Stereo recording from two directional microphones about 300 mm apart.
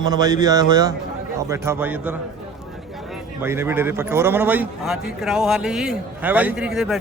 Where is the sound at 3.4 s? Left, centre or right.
Centre.